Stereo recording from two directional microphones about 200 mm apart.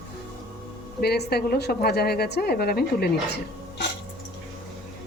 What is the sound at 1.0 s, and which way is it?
A woman's voice, 55° left (ahead or behind).